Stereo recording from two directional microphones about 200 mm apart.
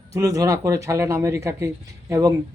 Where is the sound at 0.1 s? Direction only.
15° right (ahead or behind).